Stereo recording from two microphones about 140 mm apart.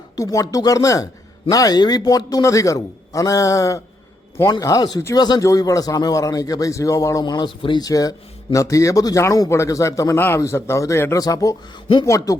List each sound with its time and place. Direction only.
0.2 s speech: 25° left (ahead or behind)